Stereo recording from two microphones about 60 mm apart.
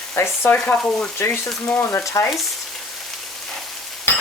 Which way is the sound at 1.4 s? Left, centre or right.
Left.